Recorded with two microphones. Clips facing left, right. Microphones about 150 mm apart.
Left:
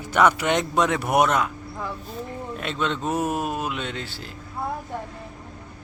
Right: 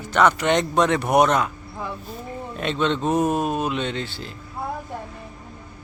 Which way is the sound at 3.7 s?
5° left (ahead or behind).